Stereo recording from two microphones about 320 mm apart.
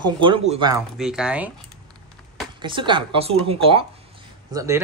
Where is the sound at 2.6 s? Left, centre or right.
Centre.